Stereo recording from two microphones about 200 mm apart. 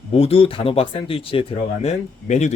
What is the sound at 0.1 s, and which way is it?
Speech, 30° left (ahead or behind).